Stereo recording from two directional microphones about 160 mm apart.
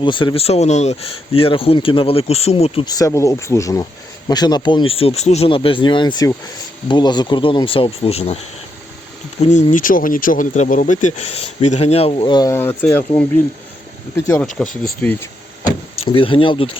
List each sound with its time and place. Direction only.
0.0 s speech: 30° left (ahead or behind)
2.8 s speech: 20° left (ahead or behind); by 8.4 s 40° left (ahead or behind)
9.4 s speech: 50° left (ahead or behind); by 13.0 s 10° left (ahead or behind)
14.2 s speech: 15° left (ahead or behind)
14.4 s speech: centre (ahead or behind)
16.0 s speech: 35° left (ahead or behind)